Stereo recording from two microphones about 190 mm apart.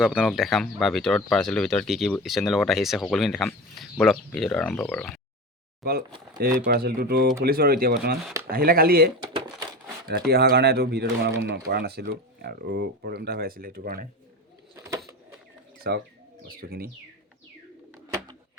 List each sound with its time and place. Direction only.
0.0 s speech: 5° right (ahead or behind)
6.7 s speech: 55° right (ahead or behind)
9.3 s crumpling: 30° right (ahead or behind)
10.1 s speech: 55° right (ahead or behind)
15.9 s speech: 60° right (ahead or behind)